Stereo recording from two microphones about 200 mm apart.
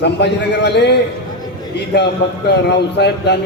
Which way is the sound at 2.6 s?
55° left (ahead or behind).